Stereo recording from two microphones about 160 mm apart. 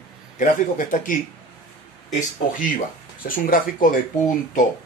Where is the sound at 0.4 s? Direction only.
55° left (ahead or behind).